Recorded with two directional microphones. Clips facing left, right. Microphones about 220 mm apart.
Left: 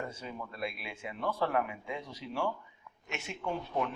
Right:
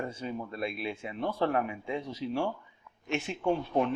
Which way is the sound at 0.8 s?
25° right (ahead or behind).